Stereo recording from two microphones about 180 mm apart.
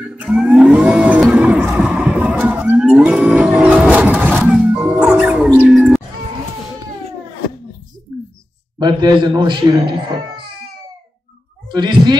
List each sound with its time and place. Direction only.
0.2 s a sound: 5° right (ahead or behind)
8.7 s speech: 25° right (ahead or behind)
11.7 s speech: 25° right (ahead or behind)